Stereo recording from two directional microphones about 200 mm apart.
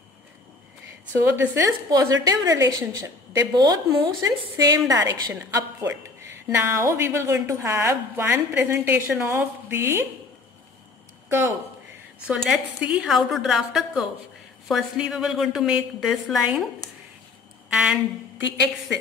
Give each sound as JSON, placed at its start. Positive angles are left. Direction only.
{"t": 1.2, "sound": "a woman's voice", "side_deg": -10}
{"t": 11.2, "sound": "a woman's voice", "side_deg": -15}
{"t": 17.7, "sound": "a woman's voice", "side_deg": -5}